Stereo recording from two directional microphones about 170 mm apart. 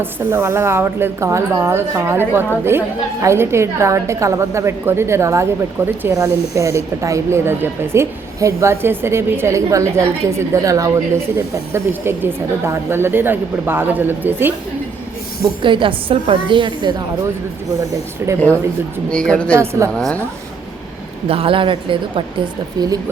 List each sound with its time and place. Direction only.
0.0 s speech: 15° right (ahead or behind)
15.6 s a woman's voice: 30° right (ahead or behind)
18.2 s speech: 15° right (ahead or behind)
19.1 s a woman's voice: 5° left (ahead or behind)
21.2 s a woman's voice: 35° right (ahead or behind)